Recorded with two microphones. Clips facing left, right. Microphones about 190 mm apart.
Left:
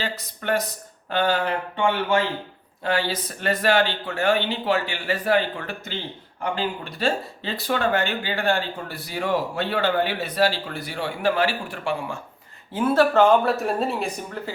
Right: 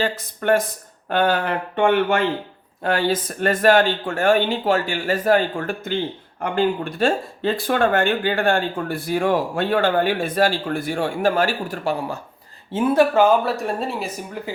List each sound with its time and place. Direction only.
0.0 s speech: 50° right (ahead or behind)
12.7 s speech: 15° right (ahead or behind); by 14.1 s centre (ahead or behind)